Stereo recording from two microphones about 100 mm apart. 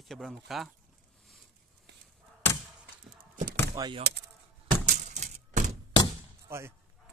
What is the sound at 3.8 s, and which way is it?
Speech, 35° right (ahead or behind).